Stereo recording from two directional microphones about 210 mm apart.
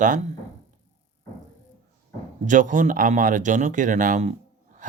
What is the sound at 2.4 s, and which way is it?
Speech, 40° right (ahead or behind).